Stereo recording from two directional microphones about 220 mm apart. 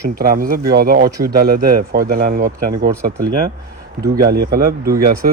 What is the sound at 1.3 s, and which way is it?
Speech, 45° right (ahead or behind).